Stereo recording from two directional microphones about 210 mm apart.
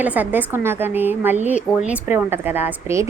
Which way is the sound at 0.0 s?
10° right (ahead or behind).